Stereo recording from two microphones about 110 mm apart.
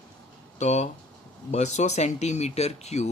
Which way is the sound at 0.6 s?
90° left.